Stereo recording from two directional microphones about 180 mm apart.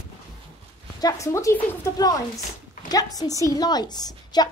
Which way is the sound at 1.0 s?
20° left (ahead or behind).